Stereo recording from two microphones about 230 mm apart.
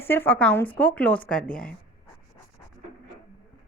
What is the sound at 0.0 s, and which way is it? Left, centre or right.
A woman's voice, centre.